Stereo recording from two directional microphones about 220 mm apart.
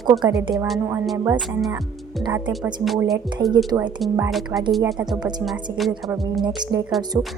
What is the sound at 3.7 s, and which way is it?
Speech, 15° right (ahead or behind).